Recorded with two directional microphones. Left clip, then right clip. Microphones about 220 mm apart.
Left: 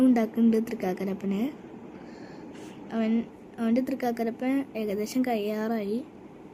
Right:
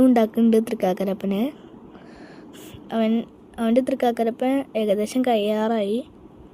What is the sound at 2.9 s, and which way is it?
A woman's voice, 25° right (ahead or behind).